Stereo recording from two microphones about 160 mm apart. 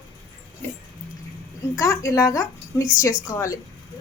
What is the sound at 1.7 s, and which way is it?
A woman's voice, 20° left (ahead or behind).